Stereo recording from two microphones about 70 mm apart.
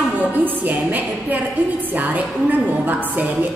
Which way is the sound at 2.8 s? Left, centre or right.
Right.